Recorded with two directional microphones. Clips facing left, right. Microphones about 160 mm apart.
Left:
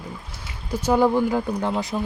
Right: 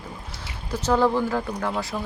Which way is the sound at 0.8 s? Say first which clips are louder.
Left 2 dB; 15° left (ahead or behind).